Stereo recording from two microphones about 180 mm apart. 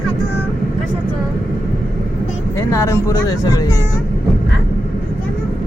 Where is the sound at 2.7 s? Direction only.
15° left (ahead or behind).